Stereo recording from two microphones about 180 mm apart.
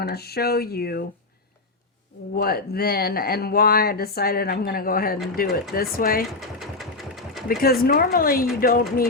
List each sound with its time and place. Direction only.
0.0 s speech: 60° left (ahead or behind)
2.3 s speech: 55° left (ahead or behind)
6.6 s sewing machine: centre (ahead or behind)
7.4 s speech: 55° left (ahead or behind)